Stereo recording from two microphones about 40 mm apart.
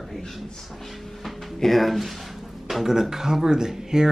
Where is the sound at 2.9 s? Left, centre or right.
Centre.